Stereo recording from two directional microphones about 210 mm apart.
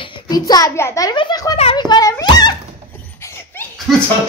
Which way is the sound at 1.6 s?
25° left (ahead or behind).